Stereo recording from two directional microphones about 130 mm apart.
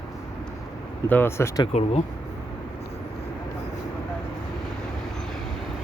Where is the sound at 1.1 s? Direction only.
20° left (ahead or behind).